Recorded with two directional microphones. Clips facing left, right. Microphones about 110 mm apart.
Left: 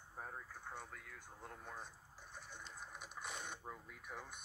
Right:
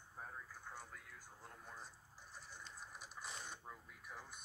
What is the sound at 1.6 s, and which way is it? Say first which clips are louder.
Speech: left 3 dB; 60° left (ahead or behind).